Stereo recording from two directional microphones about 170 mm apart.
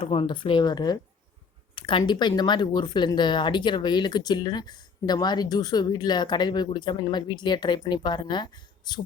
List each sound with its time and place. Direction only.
0.0 s speech: 30° left (ahead or behind)